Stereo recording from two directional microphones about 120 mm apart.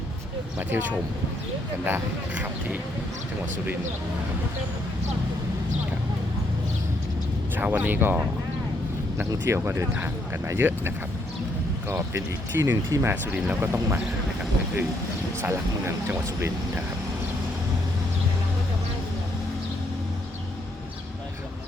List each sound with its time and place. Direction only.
0.7 s speech: 15° right (ahead or behind)
7.5 s speech: 15° right (ahead or behind)
15.4 s speech: 20° right (ahead or behind)